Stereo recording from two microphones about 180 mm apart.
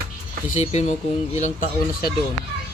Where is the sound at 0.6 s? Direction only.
40° left (ahead or behind).